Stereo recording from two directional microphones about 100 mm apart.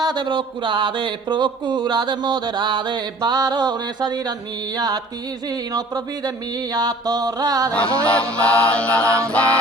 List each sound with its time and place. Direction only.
0.0 s speech: 45° right (ahead or behind)
5.7 s speech: 40° right (ahead or behind)
6.7 s mantra: 40° right (ahead or behind)
7.7 s chant: 10° left (ahead or behind)